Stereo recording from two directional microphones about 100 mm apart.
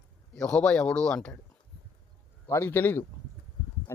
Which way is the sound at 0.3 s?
10° left (ahead or behind).